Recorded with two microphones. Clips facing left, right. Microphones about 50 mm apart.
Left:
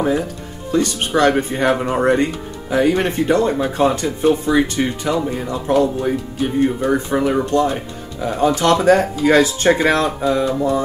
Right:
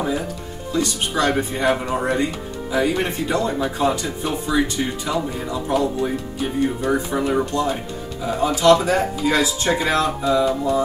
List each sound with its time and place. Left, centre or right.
0.7 s speech: left
8.2 s speech: left